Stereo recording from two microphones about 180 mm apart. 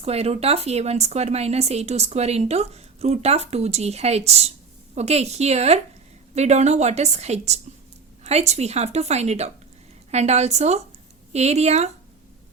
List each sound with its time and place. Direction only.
0.0 s a woman's voice: 35° right (ahead or behind)